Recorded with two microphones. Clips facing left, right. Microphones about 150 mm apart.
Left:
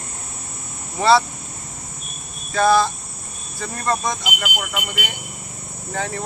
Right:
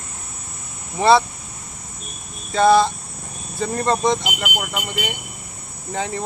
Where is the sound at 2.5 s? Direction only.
20° right (ahead or behind).